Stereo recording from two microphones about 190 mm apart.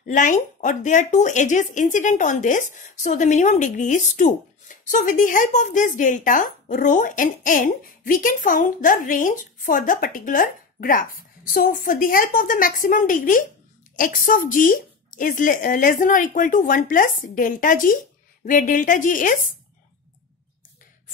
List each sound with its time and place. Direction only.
0.0 s speech: 40° left (ahead or behind)